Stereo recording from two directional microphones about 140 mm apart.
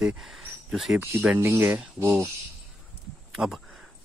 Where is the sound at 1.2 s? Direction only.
15° right (ahead or behind).